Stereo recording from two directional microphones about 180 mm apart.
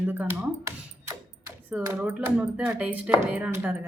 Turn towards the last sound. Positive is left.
turn(degrees=-10)  # may be behind; listen again after turning